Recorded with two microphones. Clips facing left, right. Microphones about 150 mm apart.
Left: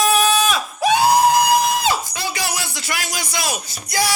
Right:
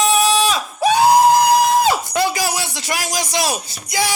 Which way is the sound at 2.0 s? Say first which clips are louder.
Right 9 dB; 60° right (ahead or behind).